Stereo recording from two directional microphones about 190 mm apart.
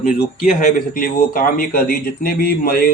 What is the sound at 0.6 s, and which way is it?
A man's voice, 45° left (ahead or behind).